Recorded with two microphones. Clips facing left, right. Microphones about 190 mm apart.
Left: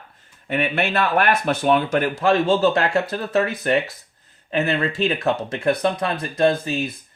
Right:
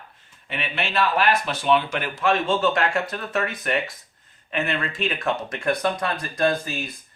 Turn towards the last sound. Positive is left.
turn(degrees=25)  # may be behind; listen again after turning